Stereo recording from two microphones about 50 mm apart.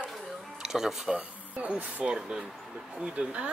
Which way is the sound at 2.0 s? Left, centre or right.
Centre.